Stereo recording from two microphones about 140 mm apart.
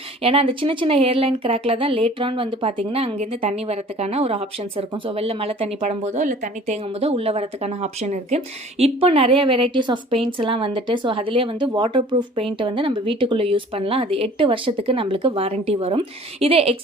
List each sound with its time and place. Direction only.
0.2 s speech: 40° right (ahead or behind)
8.8 s a woman's voice: 45° right (ahead or behind)